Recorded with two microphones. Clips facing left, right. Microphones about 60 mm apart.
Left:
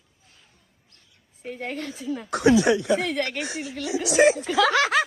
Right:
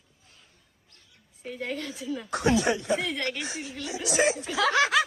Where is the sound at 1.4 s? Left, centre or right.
Left.